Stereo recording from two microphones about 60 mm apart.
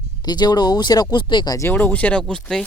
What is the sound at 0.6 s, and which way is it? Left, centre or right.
Speech, left.